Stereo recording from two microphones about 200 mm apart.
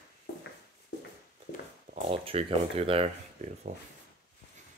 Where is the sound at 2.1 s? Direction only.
30° right (ahead or behind).